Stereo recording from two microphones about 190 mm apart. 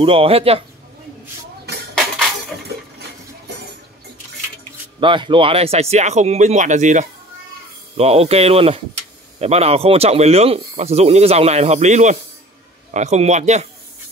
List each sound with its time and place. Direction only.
0.0 s a man's voice: 30° right (ahead or behind)
2.0 s music: centre (ahead or behind)
5.0 s speech: 25° right (ahead or behind)